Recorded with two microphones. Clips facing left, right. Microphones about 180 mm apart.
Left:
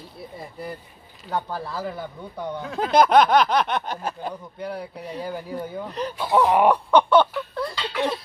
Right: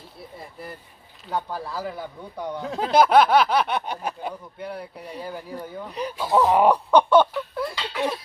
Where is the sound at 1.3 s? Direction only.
10° right (ahead or behind).